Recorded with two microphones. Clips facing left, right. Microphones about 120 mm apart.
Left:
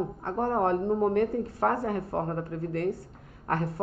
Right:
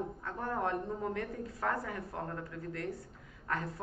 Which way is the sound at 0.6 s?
55° left (ahead or behind).